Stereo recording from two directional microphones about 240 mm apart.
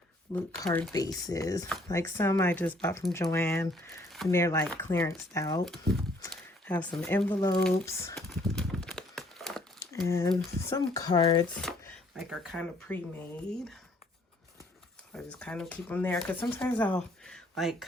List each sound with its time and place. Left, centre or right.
0.6 s speech: centre
4.3 s speech: centre
5.6 s speech: centre
8.1 s crumpling: centre
10.1 s speech: centre
11.7 s speech: centre
15.1 s speech: centre